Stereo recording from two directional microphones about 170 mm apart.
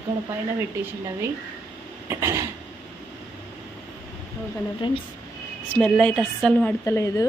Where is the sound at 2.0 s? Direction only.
15° right (ahead or behind).